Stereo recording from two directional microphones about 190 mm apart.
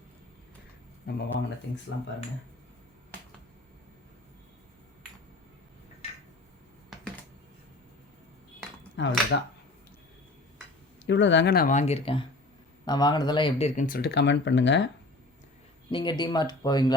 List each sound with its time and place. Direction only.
1.1 s speech: 50° left (ahead or behind)
9.0 s speech: 75° left (ahead or behind)
11.0 s speech: 70° left (ahead or behind)
15.9 s speech: 25° left (ahead or behind)